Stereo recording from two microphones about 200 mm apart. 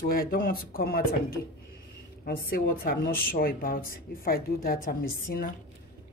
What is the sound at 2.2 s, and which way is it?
Speech, 45° left (ahead or behind).